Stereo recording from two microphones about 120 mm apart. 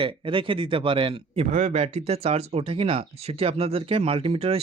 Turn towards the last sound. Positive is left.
turn(degrees=-55)  # may be behind; listen again after turning